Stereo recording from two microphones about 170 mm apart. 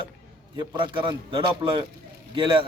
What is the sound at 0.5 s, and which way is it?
A man's voice, 25° right (ahead or behind).